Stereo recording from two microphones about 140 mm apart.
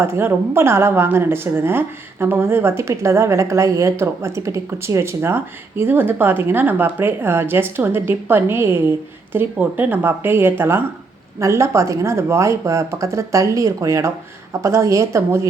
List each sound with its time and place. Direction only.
0.0 s a woman's voice: 15° right (ahead or behind)